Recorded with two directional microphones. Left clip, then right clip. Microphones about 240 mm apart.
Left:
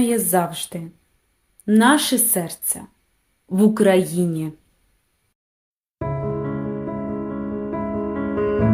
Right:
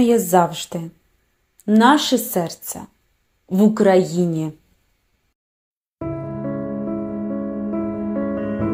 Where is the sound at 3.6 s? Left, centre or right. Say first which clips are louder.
Right 1 dB; centre.